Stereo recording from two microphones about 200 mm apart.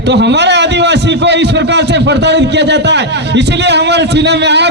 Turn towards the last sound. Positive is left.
turn(degrees=-60)  # may be behind; listen again after turning